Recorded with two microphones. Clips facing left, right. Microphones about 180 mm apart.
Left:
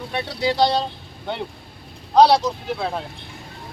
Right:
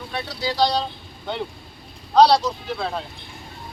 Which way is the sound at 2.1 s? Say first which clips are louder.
Left 1 dB; 15° left (ahead or behind).